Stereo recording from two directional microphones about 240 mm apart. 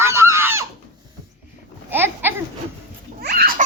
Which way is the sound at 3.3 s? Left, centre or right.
Right.